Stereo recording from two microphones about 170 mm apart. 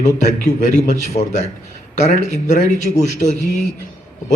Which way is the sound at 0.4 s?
45° left (ahead or behind).